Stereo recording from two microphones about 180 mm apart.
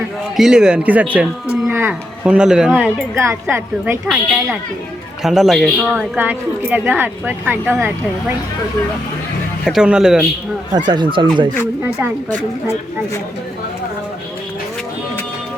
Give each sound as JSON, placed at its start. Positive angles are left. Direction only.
{"t": 0.3, "sound": "speech", "side_deg": -5}
{"t": 6.1, "sound": "speech", "side_deg": -10}
{"t": 9.6, "sound": "speech", "side_deg": -5}
{"t": 10.8, "sound": "speech", "side_deg": -25}